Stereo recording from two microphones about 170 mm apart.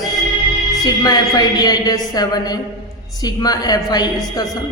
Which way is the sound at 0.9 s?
20° left (ahead or behind).